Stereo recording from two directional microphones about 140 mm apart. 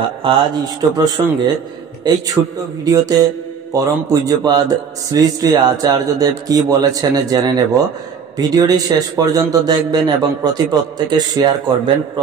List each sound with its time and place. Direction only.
0.2 s a man's voice: 40° right (ahead or behind)
2.4 s a man's voice: 10° right (ahead or behind)
2.8 s a man's voice: 25° right (ahead or behind)